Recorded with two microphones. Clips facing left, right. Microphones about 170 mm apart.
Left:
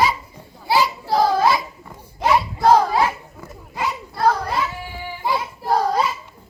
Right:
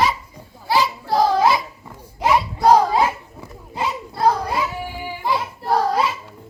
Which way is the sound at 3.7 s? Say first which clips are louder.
Right 1 dB; 25° right (ahead or behind).